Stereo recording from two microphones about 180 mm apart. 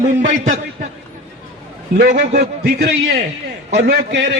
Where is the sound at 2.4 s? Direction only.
60° right (ahead or behind).